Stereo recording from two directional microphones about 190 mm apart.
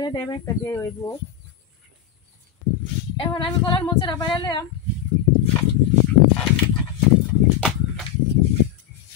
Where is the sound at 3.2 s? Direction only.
25° left (ahead or behind).